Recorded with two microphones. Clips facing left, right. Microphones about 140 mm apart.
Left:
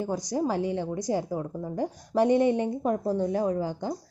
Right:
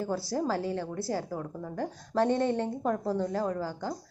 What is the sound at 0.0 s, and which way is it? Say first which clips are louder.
A woman's voice: left 2 dB; 15° left (ahead or behind).